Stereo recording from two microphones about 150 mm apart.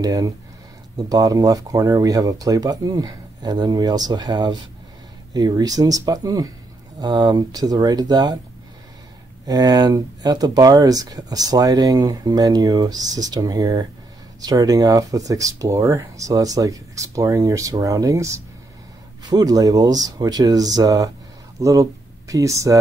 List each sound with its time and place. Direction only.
0.0 s speech: 25° right (ahead or behind)
9.5 s speech: 25° right (ahead or behind)